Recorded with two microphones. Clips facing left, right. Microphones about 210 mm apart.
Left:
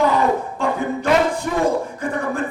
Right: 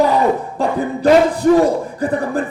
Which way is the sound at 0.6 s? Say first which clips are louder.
Right 4 dB; 35° right (ahead or behind).